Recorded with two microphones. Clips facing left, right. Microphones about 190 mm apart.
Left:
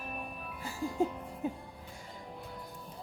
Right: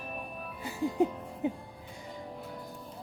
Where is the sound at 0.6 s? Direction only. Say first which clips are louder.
Right 4 dB; 20° right (ahead or behind).